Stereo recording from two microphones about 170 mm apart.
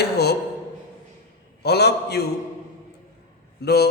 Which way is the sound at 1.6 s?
75° left (ahead or behind).